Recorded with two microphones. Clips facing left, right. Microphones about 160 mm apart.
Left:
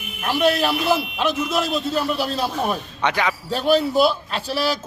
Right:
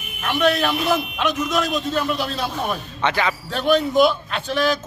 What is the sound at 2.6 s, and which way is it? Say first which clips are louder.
Speech: left 1 dB; 10° left (ahead or behind).